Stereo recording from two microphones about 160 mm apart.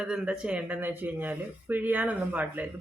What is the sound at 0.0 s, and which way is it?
Speech, 5° right (ahead or behind).